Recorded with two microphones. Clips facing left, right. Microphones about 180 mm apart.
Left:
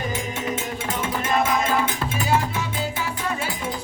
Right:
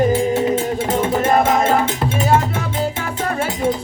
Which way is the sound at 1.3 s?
45° right (ahead or behind).